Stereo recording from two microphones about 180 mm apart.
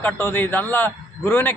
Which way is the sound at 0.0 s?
10° left (ahead or behind).